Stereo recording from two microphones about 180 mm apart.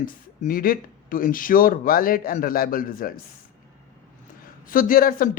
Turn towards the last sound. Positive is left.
turn(degrees=50)  # may be behind; listen again after turning